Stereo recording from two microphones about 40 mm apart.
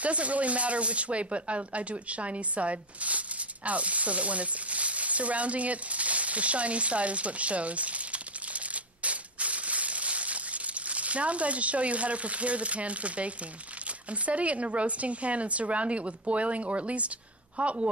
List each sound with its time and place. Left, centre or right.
0.0 s a woman's voice: right